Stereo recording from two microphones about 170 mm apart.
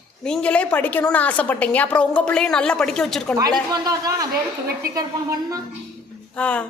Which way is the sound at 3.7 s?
20° right (ahead or behind).